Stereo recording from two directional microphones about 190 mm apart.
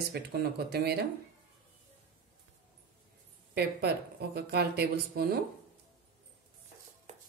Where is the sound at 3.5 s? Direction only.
55° right (ahead or behind).